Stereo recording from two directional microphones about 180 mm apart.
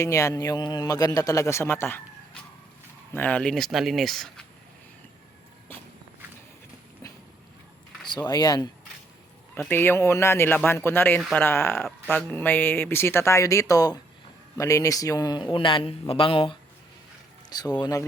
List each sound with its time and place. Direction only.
0.0 s speech: 15° left (ahead or behind)
8.2 s speech: 20° left (ahead or behind)